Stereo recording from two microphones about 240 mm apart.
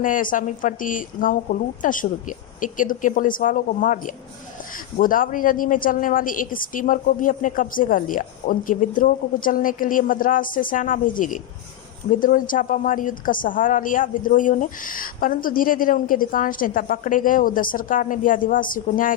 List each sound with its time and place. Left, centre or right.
0.0 s a woman's voice: left